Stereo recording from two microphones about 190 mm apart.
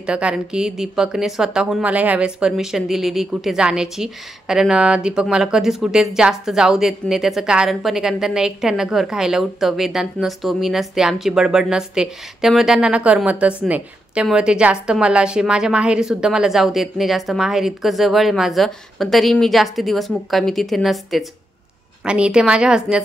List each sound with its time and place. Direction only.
0.0 s a woman's voice: 5° right (ahead or behind)